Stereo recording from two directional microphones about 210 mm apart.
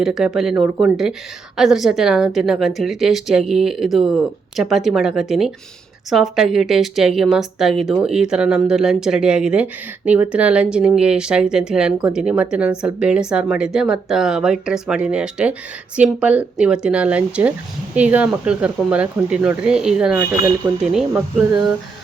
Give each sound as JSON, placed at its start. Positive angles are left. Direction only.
{"t": 0.0, "sound": "speech", "side_deg": 0}